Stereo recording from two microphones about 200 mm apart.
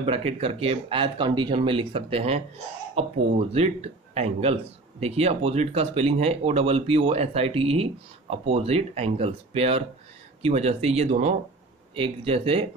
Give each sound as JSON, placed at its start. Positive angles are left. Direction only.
{"t": 0.0, "sound": "speech", "side_deg": -30}